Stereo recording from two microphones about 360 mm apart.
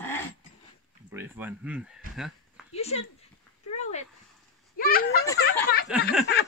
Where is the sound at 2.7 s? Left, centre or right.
Centre.